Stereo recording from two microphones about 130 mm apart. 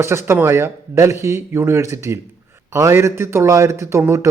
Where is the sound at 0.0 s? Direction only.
20° right (ahead or behind).